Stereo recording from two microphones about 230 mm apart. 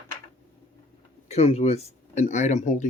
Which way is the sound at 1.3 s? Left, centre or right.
Left.